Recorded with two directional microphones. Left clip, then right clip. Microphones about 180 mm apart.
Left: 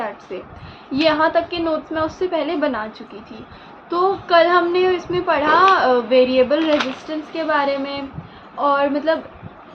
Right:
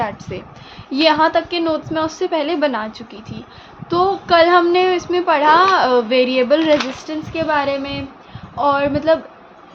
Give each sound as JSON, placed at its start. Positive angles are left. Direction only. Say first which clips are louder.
{"t": 0.9, "sound": "a woman's voice", "louder": "right 3 dB", "side_deg": -45}
{"t": 3.8, "sound": "a woman's voice", "louder": "right 3 dB", "side_deg": -50}